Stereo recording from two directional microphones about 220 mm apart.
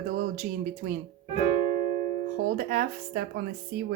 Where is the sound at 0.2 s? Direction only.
35° right (ahead or behind).